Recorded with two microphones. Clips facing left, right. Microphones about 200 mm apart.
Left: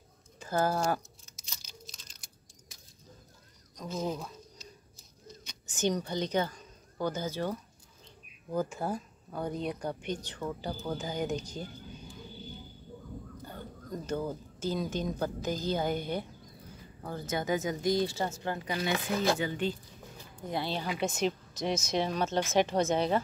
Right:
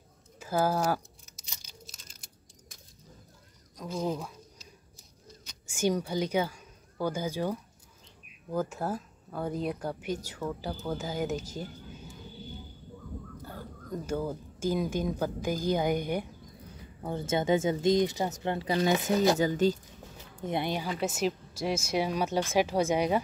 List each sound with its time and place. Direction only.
0.4 s speech: 10° right (ahead or behind)
1.6 s a sound: 5° right (ahead or behind)
3.7 s speech: 10° right (ahead or behind)
5.4 s speech: 5° right (ahead or behind)
13.4 s speech: 5° right (ahead or behind); by 18.9 s 25° right (ahead or behind)
19.3 s speech: 40° right (ahead or behind)
20.2 s a sound: 20° right (ahead or behind)
21.0 s speech: 5° right (ahead or behind)